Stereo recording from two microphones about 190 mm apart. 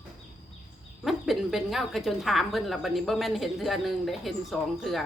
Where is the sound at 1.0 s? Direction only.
Centre (ahead or behind).